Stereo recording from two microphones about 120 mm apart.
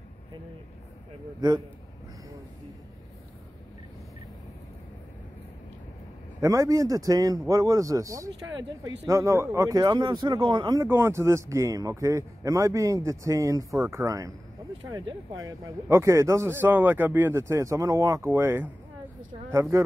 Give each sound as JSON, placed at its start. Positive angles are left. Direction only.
{"t": 6.4, "sound": "speech", "side_deg": -25}
{"t": 10.7, "sound": "speech", "side_deg": -25}
{"t": 15.3, "sound": "speech", "side_deg": -30}